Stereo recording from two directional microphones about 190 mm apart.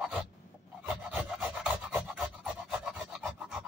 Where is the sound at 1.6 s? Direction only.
5° right (ahead or behind).